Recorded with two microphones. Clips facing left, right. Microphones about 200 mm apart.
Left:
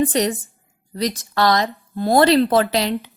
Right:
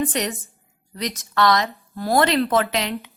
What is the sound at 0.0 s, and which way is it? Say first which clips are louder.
A woman's voice: left 5 dB; 35° left (ahead or behind).